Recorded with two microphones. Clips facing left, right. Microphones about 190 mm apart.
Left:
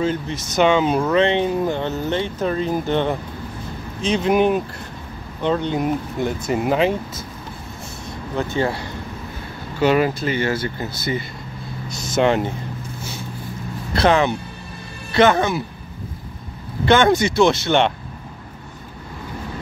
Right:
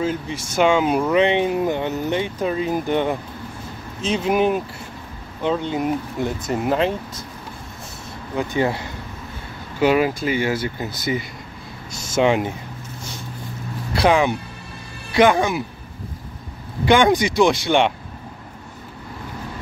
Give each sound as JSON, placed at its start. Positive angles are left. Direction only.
{"t": 0.0, "sound": "speech", "side_deg": -5}
{"t": 8.4, "sound": "speech", "side_deg": -15}
{"t": 13.9, "sound": "speech", "side_deg": -10}
{"t": 16.8, "sound": "speech", "side_deg": -15}